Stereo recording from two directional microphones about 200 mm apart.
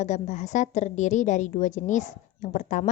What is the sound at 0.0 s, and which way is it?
A woman's voice, 35° left (ahead or behind).